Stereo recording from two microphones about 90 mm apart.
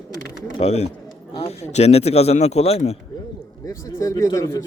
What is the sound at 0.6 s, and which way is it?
Speech, 90° left.